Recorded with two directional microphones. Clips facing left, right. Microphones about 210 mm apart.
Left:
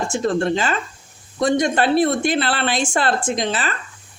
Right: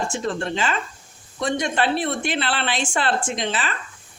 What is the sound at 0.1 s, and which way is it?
A woman's voice, 40° left (ahead or behind).